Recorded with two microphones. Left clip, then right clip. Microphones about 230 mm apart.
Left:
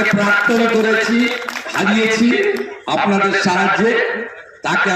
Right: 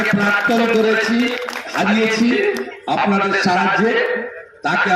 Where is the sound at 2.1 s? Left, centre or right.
Centre.